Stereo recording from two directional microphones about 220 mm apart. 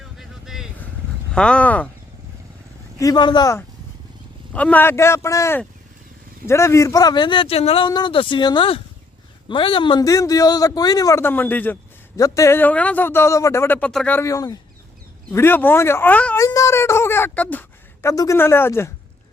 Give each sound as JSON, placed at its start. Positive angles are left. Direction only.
{"t": 0.0, "sound": "vehicle", "side_deg": 0}
{"t": 1.3, "sound": "speech", "side_deg": 5}
{"t": 3.0, "sound": "a man's voice", "side_deg": 20}
{"t": 4.5, "sound": "a man's voice", "side_deg": 5}